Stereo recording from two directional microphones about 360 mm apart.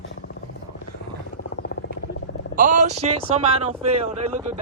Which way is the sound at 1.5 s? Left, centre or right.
Left.